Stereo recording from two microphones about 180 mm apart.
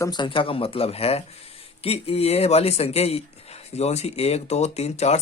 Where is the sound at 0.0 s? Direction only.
25° left (ahead or behind).